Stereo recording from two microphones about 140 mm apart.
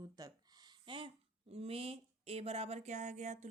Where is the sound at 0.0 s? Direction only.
25° right (ahead or behind).